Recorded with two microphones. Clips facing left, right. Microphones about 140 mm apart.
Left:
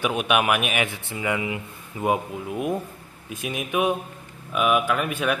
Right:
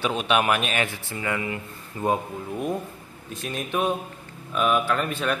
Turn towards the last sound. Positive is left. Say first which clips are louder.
# left 1 dB
turn(degrees=10)  # may be behind; listen again after turning